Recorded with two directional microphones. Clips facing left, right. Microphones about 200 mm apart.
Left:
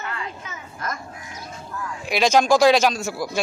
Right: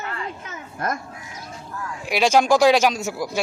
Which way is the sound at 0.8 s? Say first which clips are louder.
Right 5 dB; 60° right (ahead or behind).